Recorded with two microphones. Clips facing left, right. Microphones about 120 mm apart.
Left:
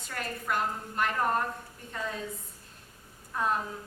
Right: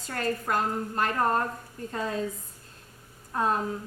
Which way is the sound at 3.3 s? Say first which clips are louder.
Right 3 dB; 35° right (ahead or behind).